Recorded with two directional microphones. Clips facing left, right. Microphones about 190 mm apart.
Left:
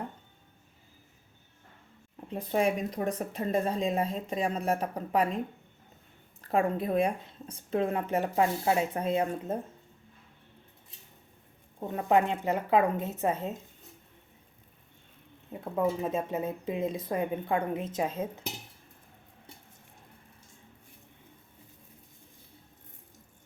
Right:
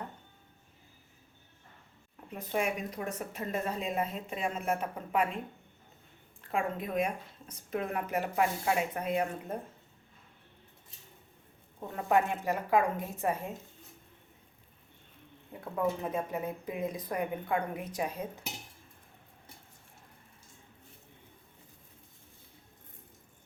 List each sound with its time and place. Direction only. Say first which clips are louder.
2.3 s speech: left 5 dB; 30° left (ahead or behind)
6.5 s speech: left 6 dB; 35° left (ahead or behind)
11.8 s speech: left 3 dB; 20° left (ahead or behind)
15.5 s speech: left 3 dB; 20° left (ahead or behind)